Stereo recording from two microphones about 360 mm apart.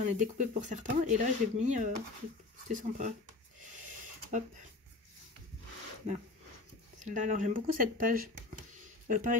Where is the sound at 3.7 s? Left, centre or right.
Right.